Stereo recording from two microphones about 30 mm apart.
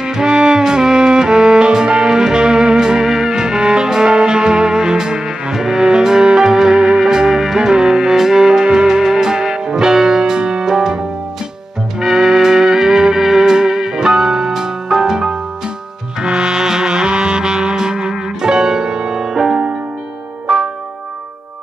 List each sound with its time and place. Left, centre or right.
0.0 s music: right
10.6 s music: centre
12.0 s music: centre
16.2 s music: right